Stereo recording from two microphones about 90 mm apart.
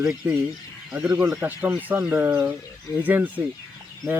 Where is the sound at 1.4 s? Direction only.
20° right (ahead or behind).